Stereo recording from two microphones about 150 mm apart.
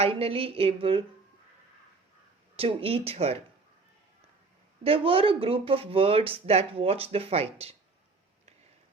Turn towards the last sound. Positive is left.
turn(degrees=-40)  # may be behind; listen again after turning